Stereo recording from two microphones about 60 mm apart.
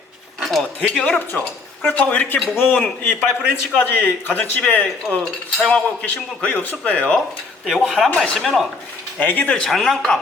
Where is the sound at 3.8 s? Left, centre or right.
Left.